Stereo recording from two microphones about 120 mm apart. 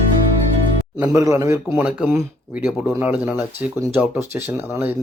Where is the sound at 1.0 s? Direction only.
25° right (ahead or behind).